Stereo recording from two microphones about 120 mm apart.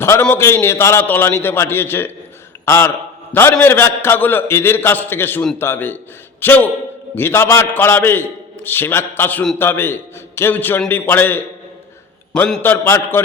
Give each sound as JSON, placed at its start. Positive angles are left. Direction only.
{"t": 0.0, "sound": "a man's voice", "side_deg": 20}
{"t": 12.3, "sound": "a man's voice", "side_deg": 5}
{"t": 12.6, "sound": "a man's voice", "side_deg": 20}